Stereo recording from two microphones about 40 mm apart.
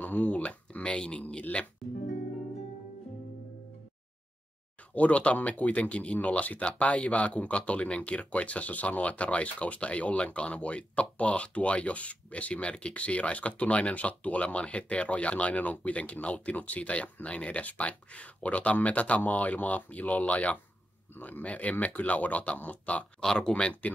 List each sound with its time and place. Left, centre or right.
0.0 s speech: left
4.9 s speech: left
23.2 s speech: centre
23.8 s speech: left